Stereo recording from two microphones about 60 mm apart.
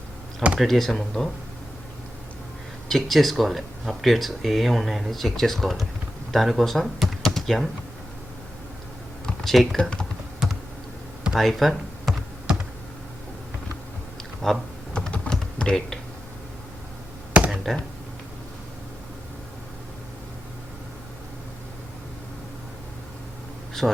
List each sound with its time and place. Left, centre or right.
0.6 s speech: centre
2.9 s speech: centre
9.2 s computer keyboard: centre
11.3 s speech: centre
12.5 s computer keyboard: centre
14.4 s speech: centre
14.9 s typing: centre
17.3 s tap: right
23.8 s speech: centre